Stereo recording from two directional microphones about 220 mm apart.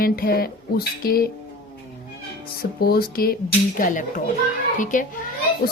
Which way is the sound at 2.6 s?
45° left (ahead or behind).